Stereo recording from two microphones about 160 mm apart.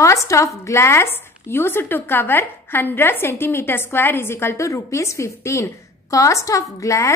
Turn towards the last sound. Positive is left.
turn(degrees=20)  # may be behind; listen again after turning